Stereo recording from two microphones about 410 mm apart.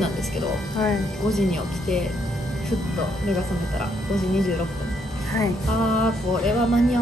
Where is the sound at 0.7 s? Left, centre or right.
Centre.